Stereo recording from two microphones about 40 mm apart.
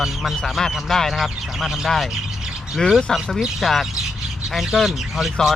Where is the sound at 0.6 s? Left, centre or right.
Centre.